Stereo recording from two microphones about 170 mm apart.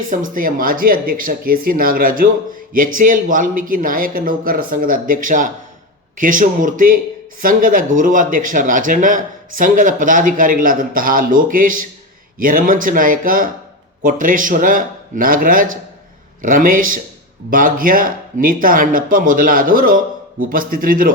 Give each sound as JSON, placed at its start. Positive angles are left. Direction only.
{"t": 0.1, "sound": "speech", "side_deg": -55}